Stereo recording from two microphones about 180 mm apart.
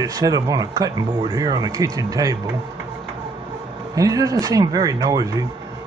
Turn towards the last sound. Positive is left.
turn(degrees=-20)  # may be behind; listen again after turning